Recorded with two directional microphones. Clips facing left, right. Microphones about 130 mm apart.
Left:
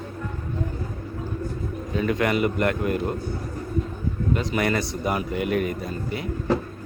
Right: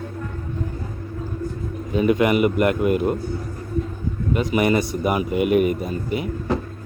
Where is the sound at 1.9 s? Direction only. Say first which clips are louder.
Right 5 dB; 15° right (ahead or behind).